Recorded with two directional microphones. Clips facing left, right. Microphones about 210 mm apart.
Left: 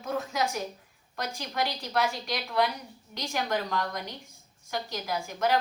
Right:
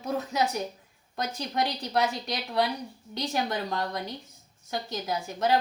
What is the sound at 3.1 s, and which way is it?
Speech, 30° right (ahead or behind).